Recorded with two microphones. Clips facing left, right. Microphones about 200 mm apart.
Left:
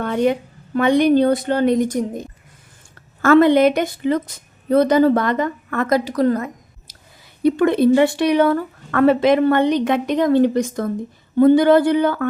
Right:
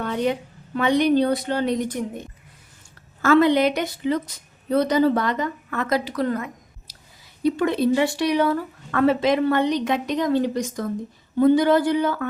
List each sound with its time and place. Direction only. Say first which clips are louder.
0.0 s a woman's voice: left 5 dB; 50° left (ahead or behind)
3.2 s a woman's voice: left 5 dB; 50° left (ahead or behind)
7.4 s speech: left 6 dB; 55° left (ahead or behind)